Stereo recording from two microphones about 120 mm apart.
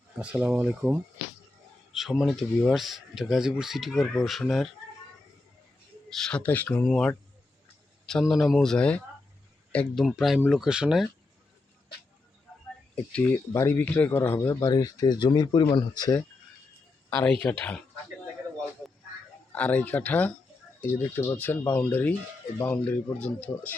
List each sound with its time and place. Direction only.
0.2 s speech: 10° right (ahead or behind)
6.1 s speech: 5° left (ahead or behind)
8.3 s speech: centre (ahead or behind)
13.1 s speech: 10° left (ahead or behind)
13.5 s speech: 20° left (ahead or behind)
17.1 s speech: 20° left (ahead or behind)
19.5 s speech: 10° left (ahead or behind)